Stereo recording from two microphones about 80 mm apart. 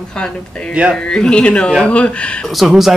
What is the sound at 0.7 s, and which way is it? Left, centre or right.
Speech, centre.